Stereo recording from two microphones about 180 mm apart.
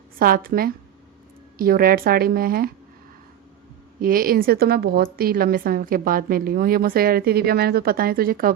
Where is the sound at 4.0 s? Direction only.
55° right (ahead or behind).